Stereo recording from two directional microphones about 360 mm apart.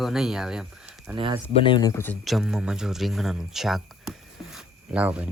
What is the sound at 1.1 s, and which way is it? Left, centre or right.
Speech, centre.